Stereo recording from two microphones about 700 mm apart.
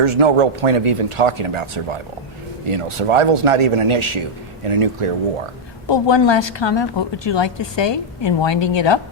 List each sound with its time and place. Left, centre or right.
0.0 s a man's voice: right
5.9 s a woman's voice: left